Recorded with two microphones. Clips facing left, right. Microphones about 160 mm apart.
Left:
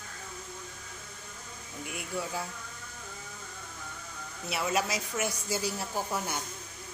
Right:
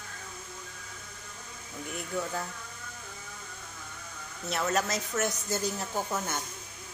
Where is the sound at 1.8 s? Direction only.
10° left (ahead or behind).